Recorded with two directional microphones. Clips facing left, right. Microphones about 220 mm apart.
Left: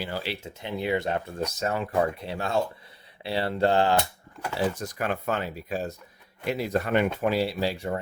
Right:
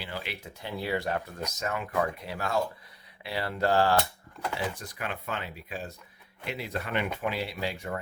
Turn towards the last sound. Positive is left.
turn(degrees=35)  # may be behind; listen again after turning